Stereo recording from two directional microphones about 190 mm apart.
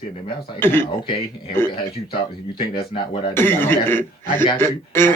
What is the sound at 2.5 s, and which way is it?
Speech, 25° left (ahead or behind).